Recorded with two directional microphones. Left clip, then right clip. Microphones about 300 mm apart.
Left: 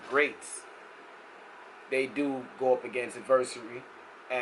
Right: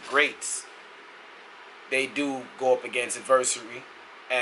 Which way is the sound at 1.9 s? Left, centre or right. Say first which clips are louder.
Right 3 dB; centre.